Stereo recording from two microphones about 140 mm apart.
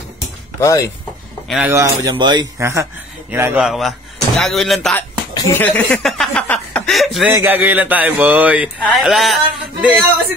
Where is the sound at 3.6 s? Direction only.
Centre (ahead or behind).